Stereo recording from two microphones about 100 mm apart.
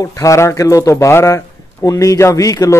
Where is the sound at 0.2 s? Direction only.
30° left (ahead or behind).